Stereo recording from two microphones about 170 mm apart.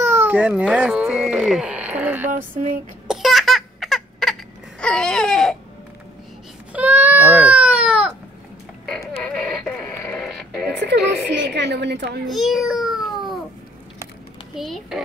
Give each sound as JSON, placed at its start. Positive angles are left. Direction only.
{"t": 0.0, "sound": "speech", "side_deg": -10}
{"t": 2.3, "sound": "a sound", "side_deg": -55}
{"t": 3.1, "sound": "laughter", "side_deg": 0}
{"t": 6.7, "sound": "baby cry", "side_deg": -10}
{"t": 9.2, "sound": "radio", "side_deg": 5}
{"t": 11.5, "sound": "a woman's voice", "side_deg": -90}
{"t": 12.3, "sound": "a child's voice", "side_deg": 0}
{"t": 14.5, "sound": "a child's voice", "side_deg": 0}